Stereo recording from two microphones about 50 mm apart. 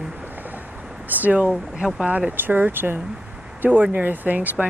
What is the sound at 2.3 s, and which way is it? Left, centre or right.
Speech, right.